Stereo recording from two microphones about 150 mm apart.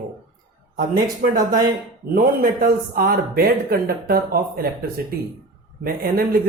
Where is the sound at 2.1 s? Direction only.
70° right (ahead or behind).